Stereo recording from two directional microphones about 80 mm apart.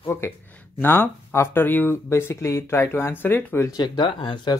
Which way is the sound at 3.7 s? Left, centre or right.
Left.